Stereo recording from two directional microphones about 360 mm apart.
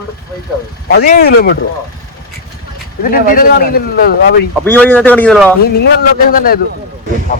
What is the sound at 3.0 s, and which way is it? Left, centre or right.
Speech, left.